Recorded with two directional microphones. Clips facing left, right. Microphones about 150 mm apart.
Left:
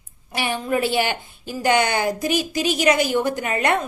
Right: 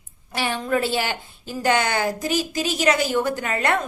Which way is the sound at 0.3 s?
15° left (ahead or behind).